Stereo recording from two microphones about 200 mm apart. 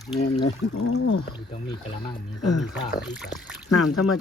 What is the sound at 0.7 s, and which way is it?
Speech, 65° left (ahead or behind).